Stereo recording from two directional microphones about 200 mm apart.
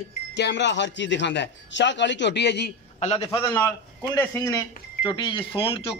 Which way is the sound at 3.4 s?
10° left (ahead or behind).